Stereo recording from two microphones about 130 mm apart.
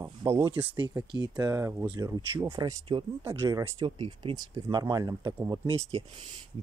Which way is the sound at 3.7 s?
40° right (ahead or behind).